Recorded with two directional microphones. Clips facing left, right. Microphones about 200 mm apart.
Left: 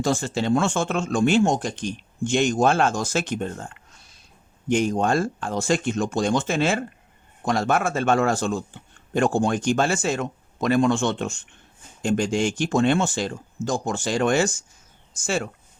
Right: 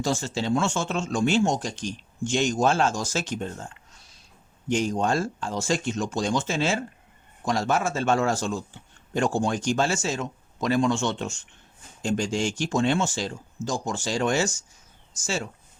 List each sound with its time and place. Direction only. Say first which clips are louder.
0.0 s a man's voice: left 3 dB; 55° left (ahead or behind)